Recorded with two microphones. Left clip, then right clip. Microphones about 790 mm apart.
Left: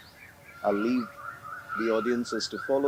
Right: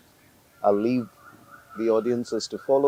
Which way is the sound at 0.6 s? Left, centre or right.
Right.